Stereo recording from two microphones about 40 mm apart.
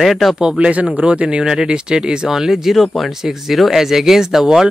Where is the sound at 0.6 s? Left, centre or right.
Right.